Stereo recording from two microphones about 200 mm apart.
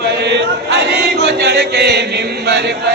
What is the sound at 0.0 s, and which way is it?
Chant, 55° right (ahead or behind).